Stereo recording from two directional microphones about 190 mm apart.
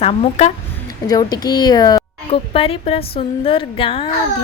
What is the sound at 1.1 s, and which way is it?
Speech, 20° left (ahead or behind).